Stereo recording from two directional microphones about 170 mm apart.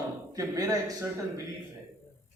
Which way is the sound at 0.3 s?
20° right (ahead or behind).